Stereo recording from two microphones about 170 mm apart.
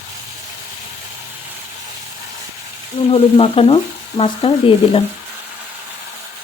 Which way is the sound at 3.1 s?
35° left (ahead or behind).